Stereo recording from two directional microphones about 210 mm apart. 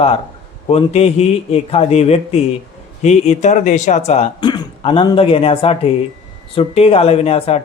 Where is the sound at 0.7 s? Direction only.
30° left (ahead or behind).